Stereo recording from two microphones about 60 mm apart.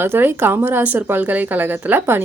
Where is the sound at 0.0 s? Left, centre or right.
Right.